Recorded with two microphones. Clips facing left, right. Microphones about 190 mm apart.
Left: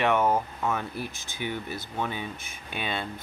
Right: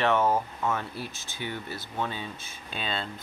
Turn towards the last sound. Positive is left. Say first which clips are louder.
# left 1 dB
turn(degrees=15)  # may be behind; listen again after turning